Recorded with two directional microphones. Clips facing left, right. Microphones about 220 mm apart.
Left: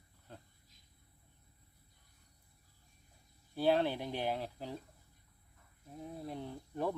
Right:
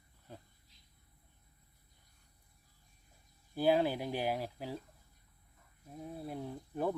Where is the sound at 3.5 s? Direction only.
10° right (ahead or behind).